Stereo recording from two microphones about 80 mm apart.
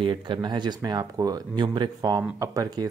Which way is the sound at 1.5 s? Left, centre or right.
Right.